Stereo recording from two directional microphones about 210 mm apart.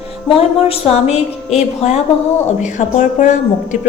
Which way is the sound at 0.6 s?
30° left (ahead or behind).